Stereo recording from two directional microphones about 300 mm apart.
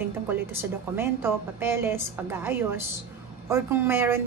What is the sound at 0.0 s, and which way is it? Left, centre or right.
A woman's voice, centre.